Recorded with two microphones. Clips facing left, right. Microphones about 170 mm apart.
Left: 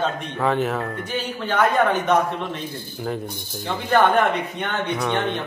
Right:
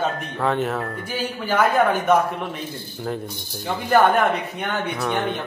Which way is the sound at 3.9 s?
Centre (ahead or behind).